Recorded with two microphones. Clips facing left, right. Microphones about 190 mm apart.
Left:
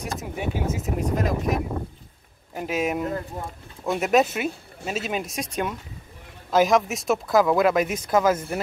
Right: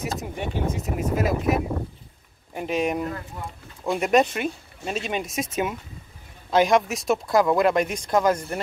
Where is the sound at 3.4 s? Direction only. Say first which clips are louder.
Left 2 dB; 40° left (ahead or behind).